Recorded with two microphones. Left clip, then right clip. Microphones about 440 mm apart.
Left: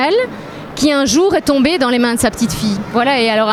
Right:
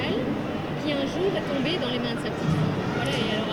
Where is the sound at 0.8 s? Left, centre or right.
Left.